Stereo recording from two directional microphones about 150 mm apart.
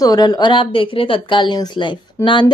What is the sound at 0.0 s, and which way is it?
A woman's voice, 25° left (ahead or behind).